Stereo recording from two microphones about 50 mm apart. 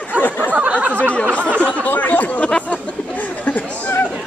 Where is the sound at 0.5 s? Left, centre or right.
Right.